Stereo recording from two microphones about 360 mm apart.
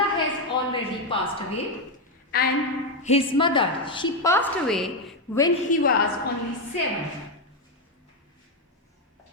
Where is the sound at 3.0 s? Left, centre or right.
Centre.